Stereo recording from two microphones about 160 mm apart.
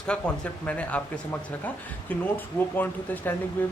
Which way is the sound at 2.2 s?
10° left (ahead or behind).